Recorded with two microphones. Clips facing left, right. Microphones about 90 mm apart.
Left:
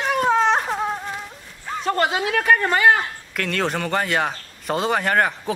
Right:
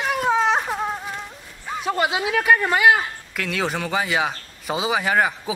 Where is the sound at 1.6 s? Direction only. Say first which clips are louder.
Left 1 dB; 5° right (ahead or behind).